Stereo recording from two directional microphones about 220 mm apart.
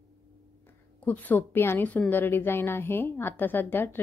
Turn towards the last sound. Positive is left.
turn(degrees=10)  # may be behind; listen again after turning